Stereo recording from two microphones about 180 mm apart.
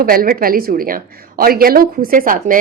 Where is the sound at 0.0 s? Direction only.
55° right (ahead or behind).